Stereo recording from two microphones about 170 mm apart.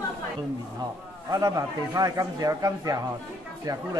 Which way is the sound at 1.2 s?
20° right (ahead or behind).